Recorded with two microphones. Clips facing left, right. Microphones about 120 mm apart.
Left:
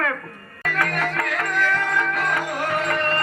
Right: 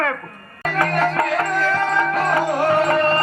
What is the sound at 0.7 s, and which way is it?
Music, 30° right (ahead or behind).